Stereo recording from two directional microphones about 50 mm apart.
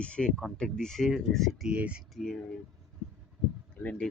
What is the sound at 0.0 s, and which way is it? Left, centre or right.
Speech, left.